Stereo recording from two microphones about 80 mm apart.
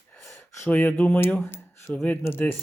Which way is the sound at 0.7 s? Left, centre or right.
Centre.